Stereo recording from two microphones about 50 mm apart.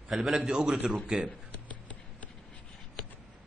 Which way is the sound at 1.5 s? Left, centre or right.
Left.